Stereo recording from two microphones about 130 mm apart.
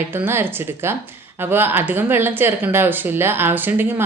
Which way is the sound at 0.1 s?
15° right (ahead or behind).